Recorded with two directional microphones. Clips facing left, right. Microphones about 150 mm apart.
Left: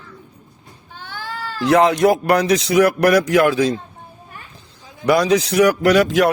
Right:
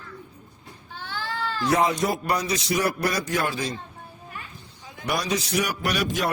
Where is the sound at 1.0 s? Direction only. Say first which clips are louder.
Left 1 dB; 10° left (ahead or behind).